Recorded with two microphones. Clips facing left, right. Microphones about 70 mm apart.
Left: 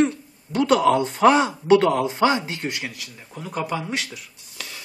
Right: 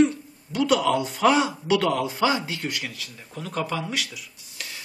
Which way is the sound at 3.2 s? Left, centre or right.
Centre.